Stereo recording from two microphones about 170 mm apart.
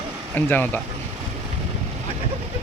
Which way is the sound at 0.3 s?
10° left (ahead or behind).